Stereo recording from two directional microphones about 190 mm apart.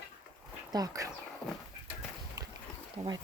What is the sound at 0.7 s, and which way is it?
Speech, 20° right (ahead or behind).